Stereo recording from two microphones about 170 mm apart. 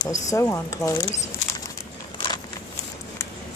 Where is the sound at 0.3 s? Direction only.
20° left (ahead or behind).